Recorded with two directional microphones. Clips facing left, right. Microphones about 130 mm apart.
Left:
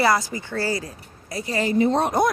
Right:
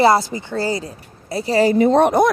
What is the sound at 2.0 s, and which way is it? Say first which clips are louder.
Speech: right 6 dB; 65° right (ahead or behind).